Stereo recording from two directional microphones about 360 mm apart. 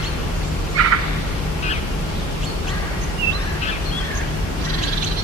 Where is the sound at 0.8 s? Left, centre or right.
Right.